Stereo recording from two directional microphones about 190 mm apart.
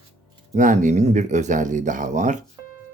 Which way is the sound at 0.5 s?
40° right (ahead or behind).